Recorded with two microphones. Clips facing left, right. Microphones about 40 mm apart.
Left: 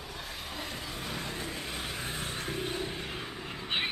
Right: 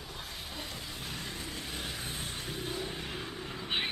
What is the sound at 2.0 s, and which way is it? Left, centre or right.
Vehicle, left.